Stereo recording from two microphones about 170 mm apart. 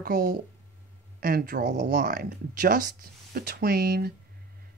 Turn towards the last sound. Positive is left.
turn(degrees=-65)  # may be behind; listen again after turning